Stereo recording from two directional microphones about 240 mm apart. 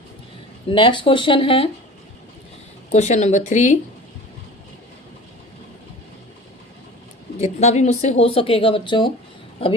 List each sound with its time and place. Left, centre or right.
0.7 s speech: left
2.9 s speech: left
7.3 s speech: left